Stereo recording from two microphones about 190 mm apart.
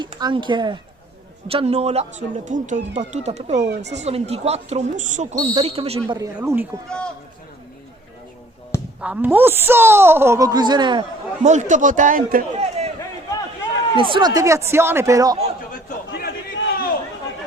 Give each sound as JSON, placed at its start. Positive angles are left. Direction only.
{"t": 0.0, "sound": "speech", "side_deg": -25}
{"t": 6.1, "sound": "a woman's voice", "side_deg": -15}
{"t": 6.8, "sound": "speech", "side_deg": 5}
{"t": 9.0, "sound": "a woman's voice", "side_deg": -5}
{"t": 11.4, "sound": "a man's voice", "side_deg": -40}
{"t": 13.9, "sound": "a woman's voice", "side_deg": -25}
{"t": 15.7, "sound": "chatter", "side_deg": 55}